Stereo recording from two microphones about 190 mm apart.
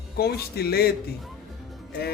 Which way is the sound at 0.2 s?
55° left (ahead or behind).